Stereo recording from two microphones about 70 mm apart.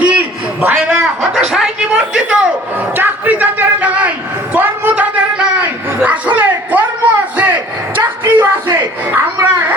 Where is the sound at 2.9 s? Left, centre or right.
Right.